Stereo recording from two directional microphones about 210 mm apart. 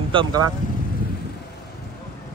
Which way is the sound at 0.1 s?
20° right (ahead or behind).